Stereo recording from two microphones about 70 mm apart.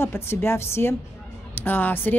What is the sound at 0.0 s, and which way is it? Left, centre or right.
A woman's voice, left.